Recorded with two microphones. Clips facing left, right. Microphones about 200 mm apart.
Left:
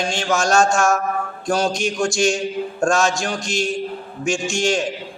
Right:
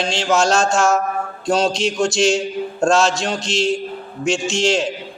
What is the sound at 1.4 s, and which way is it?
Mantra, 25° right (ahead or behind).